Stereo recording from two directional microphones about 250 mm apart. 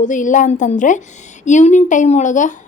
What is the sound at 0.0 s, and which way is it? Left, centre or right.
A woman's voice, left.